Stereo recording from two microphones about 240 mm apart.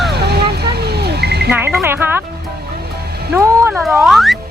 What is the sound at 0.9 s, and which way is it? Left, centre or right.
Cat, right.